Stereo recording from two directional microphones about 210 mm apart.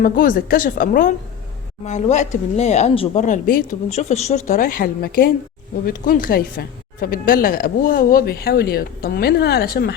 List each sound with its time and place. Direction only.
0.0 s speech: 40° left (ahead or behind)